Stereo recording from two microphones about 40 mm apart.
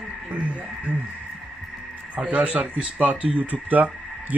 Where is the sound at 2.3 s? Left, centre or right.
Right.